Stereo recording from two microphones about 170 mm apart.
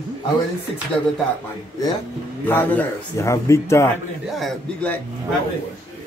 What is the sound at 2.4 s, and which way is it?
A man's voice, 10° left (ahead or behind).